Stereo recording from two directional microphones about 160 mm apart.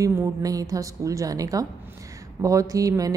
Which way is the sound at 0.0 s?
20° right (ahead or behind).